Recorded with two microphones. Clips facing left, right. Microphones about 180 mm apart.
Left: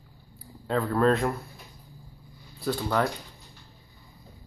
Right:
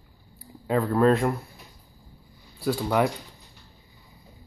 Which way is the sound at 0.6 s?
10° right (ahead or behind).